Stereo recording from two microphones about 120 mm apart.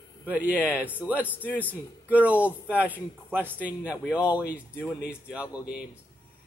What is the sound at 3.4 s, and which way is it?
Speech, 10° left (ahead or behind).